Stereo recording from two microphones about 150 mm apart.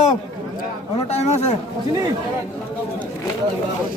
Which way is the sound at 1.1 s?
45° left (ahead or behind).